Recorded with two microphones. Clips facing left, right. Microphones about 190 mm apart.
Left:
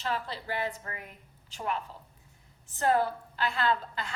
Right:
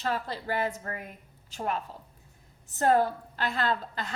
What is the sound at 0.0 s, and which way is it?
A woman's voice, 45° right (ahead or behind).